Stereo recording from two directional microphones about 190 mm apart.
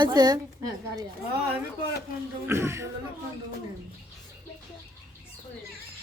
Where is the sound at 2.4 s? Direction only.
15° right (ahead or behind).